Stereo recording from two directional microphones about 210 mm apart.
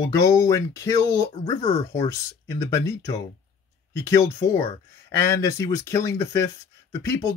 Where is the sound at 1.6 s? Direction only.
30° left (ahead or behind).